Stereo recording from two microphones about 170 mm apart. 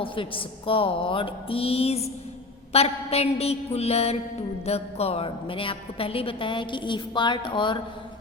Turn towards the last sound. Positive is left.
turn(degrees=30)  # may be behind; listen again after turning